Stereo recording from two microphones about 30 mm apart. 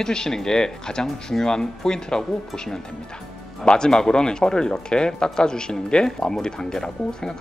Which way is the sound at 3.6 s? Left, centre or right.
Left.